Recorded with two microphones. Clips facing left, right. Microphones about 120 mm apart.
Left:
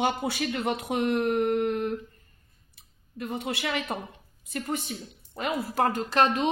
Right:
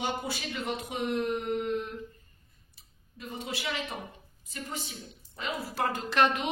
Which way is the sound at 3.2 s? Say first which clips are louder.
Left 6 dB; 60° left (ahead or behind).